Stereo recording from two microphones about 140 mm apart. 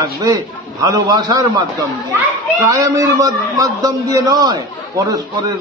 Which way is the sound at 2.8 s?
25° right (ahead or behind).